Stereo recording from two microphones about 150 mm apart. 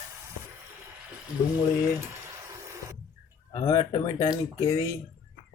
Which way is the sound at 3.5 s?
30° left (ahead or behind).